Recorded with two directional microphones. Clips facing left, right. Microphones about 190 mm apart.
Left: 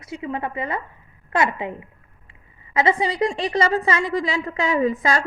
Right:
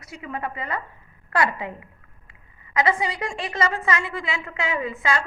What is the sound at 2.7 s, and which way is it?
A woman's voice, 30° left (ahead or behind).